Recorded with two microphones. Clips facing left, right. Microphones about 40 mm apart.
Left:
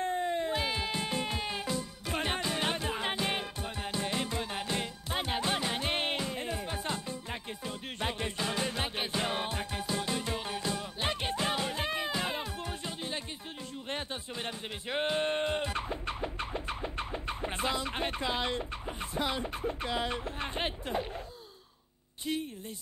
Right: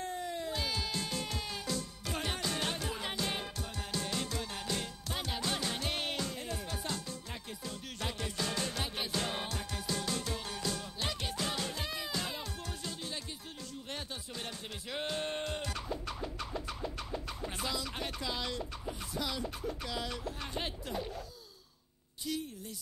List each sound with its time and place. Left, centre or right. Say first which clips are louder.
0.0 s music: left 7 dB; left
22.3 s speech: left 4 dB; left